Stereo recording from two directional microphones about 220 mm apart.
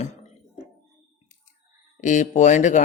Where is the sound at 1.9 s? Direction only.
35° left (ahead or behind).